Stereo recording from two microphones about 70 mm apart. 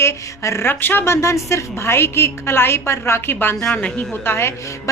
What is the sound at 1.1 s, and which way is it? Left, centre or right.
A woman's voice, left.